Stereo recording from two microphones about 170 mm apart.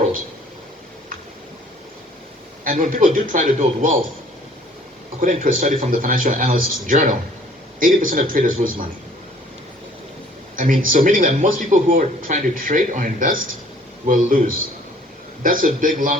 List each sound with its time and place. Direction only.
2.6 s speech: 50° right (ahead or behind)
5.2 s speech: 50° right (ahead or behind)
10.6 s speech: 50° right (ahead or behind)
15.4 s speech: 55° right (ahead or behind)